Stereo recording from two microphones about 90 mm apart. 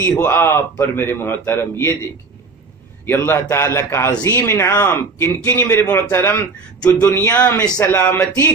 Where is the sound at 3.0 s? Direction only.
25° left (ahead or behind).